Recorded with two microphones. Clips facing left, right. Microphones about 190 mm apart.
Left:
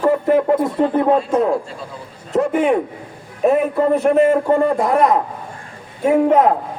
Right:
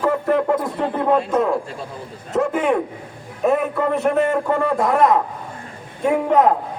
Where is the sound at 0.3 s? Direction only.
Centre (ahead or behind).